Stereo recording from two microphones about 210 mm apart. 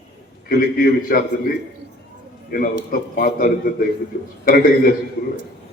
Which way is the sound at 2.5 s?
45° left (ahead or behind).